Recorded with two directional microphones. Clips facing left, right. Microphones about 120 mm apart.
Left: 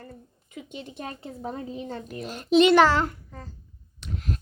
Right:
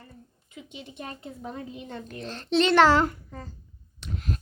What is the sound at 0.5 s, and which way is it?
A woman's voice, 50° left (ahead or behind).